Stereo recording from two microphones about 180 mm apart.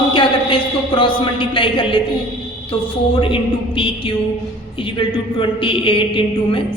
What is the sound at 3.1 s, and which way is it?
A man's voice, 30° left (ahead or behind).